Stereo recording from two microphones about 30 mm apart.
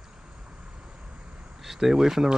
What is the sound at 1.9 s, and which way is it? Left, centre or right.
Speech, centre.